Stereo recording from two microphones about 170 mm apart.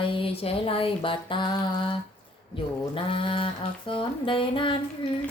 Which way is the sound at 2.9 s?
30° left (ahead or behind).